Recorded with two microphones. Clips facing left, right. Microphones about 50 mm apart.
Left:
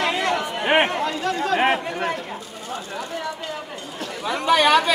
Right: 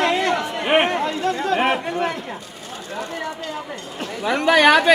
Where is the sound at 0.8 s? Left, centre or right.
Right.